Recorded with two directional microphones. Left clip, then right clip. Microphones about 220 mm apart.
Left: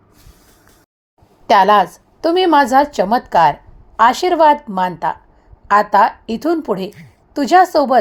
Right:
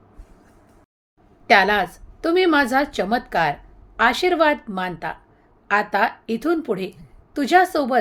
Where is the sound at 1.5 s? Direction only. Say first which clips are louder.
Left 6 dB; 20° left (ahead or behind).